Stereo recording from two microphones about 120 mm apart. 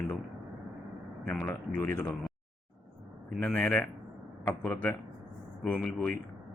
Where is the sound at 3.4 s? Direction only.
10° left (ahead or behind).